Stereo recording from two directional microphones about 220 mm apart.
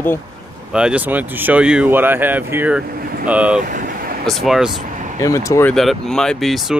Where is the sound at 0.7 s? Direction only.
5° right (ahead or behind).